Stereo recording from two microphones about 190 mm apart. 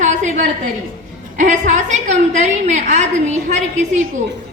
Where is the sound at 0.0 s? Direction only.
40° right (ahead or behind).